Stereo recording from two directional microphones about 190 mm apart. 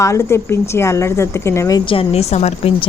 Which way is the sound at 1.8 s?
30° left (ahead or behind).